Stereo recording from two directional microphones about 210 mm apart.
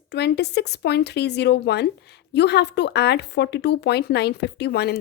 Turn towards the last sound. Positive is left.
turn(degrees=50)  # may be behind; listen again after turning